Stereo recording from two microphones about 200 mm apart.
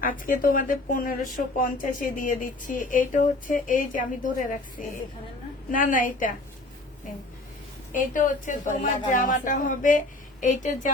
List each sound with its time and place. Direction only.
0.0 s a woman's voice: 40° left (ahead or behind)
5.7 s speech: 40° left (ahead or behind)
7.9 s speech: 40° left (ahead or behind)